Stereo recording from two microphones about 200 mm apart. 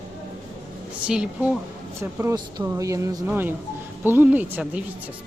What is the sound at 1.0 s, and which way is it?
Speech, 5° right (ahead or behind).